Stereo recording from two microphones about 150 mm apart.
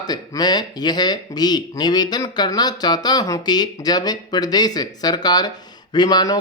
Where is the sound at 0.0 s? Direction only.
25° left (ahead or behind).